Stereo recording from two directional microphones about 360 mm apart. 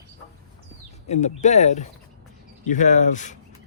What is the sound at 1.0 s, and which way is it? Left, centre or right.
Speech, centre.